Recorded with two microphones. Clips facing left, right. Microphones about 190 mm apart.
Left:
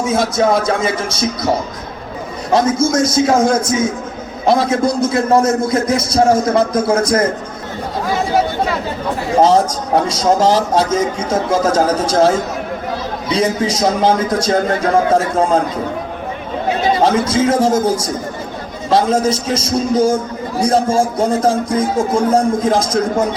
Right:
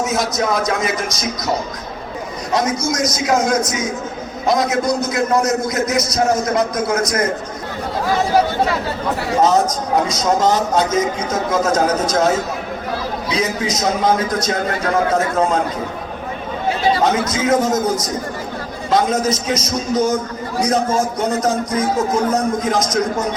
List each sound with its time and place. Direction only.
0.1 s a man's voice: 30° left (ahead or behind)
2.5 s a man's voice: 30° left (ahead or behind)
9.4 s a man's voice: 30° left (ahead or behind)
13.3 s a man's voice: 30° left (ahead or behind)
17.0 s a man's voice: 30° left (ahead or behind)